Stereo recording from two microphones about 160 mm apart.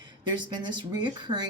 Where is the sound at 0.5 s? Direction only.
30° right (ahead or behind).